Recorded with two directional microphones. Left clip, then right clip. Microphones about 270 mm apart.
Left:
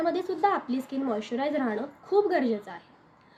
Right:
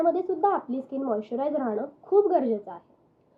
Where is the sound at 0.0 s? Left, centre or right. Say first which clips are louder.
Right 3 dB; centre.